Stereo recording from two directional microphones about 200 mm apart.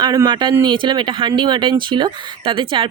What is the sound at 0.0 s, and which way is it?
Speech, 20° right (ahead or behind).